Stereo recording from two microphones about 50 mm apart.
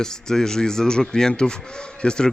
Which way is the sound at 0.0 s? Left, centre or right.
Centre.